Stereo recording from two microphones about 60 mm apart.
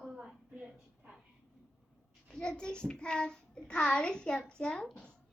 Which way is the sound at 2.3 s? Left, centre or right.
Centre.